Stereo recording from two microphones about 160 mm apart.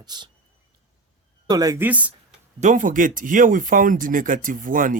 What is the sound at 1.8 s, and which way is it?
Speech, 10° right (ahead or behind).